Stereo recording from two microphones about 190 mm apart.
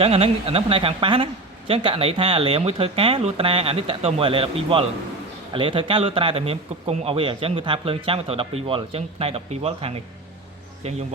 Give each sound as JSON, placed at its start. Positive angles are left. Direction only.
{"t": 0.0, "sound": "speech", "side_deg": -30}